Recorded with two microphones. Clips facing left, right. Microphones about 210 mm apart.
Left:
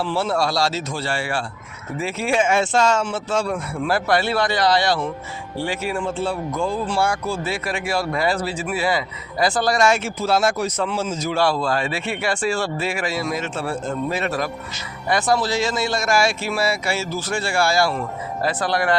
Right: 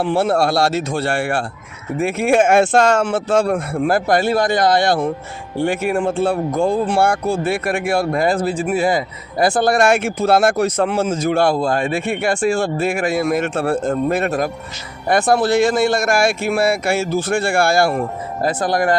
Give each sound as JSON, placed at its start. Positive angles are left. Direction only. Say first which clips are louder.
{"t": 0.0, "sound": "speech", "louder": "right 5 dB", "side_deg": -55}